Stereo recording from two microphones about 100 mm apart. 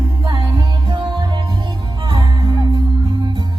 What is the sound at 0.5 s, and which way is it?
Music, 50° right (ahead or behind).